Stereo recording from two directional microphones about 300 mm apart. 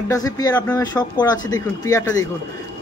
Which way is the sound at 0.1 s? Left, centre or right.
Centre.